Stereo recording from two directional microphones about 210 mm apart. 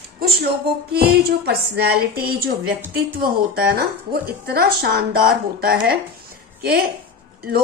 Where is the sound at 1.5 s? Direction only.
50° right (ahead or behind).